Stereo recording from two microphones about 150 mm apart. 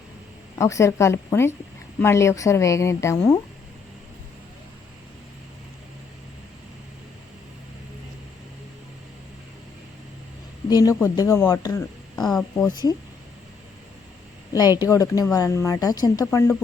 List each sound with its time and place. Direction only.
0.6 s speech: 20° left (ahead or behind)
10.7 s speech: 25° left (ahead or behind)
12.1 s speech: 5° left (ahead or behind)
14.5 s speech: 25° left (ahead or behind)